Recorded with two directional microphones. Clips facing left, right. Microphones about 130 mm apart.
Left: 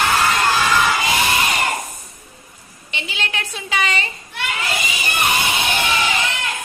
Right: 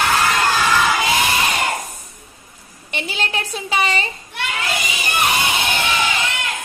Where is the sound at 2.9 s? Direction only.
40° right (ahead or behind).